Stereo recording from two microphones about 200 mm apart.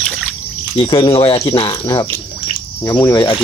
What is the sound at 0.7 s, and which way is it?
Speech, 25° left (ahead or behind).